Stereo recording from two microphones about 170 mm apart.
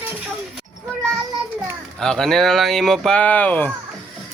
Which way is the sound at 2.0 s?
5° left (ahead or behind).